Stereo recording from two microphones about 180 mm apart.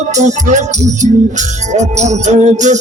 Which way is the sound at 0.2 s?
40° right (ahead or behind).